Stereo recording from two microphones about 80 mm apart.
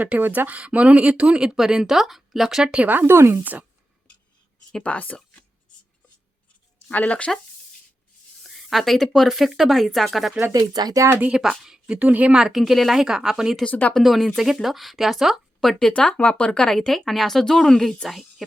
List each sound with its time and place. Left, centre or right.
0.0 s speech: right; by 2.8 s centre
2.8 s speech: right
3.4 s speech: right
4.7 s speech: centre
6.8 s speech: centre
8.4 s speech: centre
10.5 s speech: right
11.2 s speech: centre
13.7 s speech: centre
13.9 s speech: centre
15.9 s speech: centre